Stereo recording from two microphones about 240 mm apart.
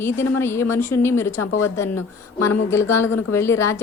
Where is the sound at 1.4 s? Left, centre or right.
Left.